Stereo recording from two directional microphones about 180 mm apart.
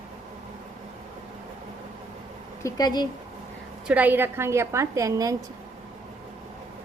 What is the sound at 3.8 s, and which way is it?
A woman's voice, 10° right (ahead or behind).